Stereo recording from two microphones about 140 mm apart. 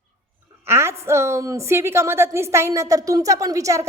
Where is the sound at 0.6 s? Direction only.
20° right (ahead or behind).